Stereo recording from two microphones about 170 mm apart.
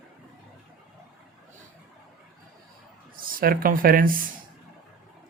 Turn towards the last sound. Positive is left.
turn(degrees=-55)  # may be behind; listen again after turning